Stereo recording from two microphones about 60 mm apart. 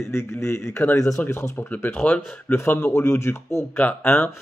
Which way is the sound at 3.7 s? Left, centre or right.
Left.